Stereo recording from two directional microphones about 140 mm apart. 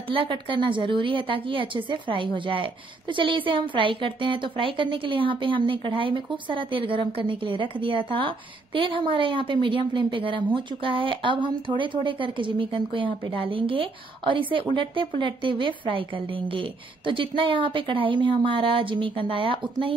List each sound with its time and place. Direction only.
0.1 s a woman's voice: 40° right (ahead or behind)